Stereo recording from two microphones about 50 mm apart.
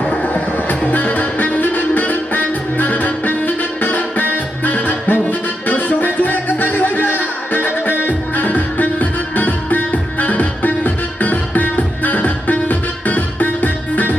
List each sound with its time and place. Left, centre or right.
0.0 s music: left